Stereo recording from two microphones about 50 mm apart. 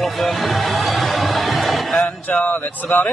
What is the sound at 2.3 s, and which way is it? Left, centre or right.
Speech, left.